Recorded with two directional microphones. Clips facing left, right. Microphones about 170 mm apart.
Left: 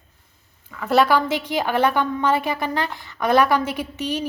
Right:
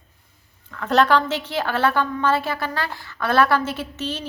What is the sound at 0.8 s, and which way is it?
A woman's voice, 10° left (ahead or behind).